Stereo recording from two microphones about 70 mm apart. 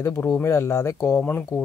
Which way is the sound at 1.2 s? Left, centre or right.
Left.